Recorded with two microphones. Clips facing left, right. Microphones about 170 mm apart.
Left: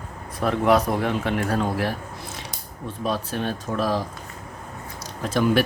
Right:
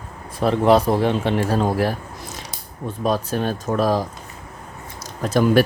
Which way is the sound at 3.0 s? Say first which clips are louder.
Right 5 dB; 45° right (ahead or behind).